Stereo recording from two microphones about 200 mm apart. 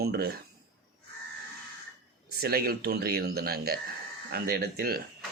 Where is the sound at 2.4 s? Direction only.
50° right (ahead or behind).